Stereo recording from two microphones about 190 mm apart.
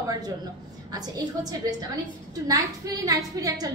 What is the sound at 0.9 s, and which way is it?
A woman's voice, 20° right (ahead or behind).